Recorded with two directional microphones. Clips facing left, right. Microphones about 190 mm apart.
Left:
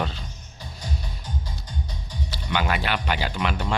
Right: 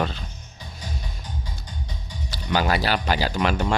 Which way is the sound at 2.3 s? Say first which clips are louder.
Right 3 dB; 40° right (ahead or behind).